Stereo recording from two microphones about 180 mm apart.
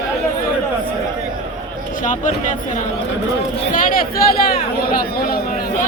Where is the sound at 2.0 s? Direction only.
45° left (ahead or behind).